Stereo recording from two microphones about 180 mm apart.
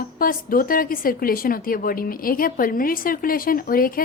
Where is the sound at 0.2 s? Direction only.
50° left (ahead or behind).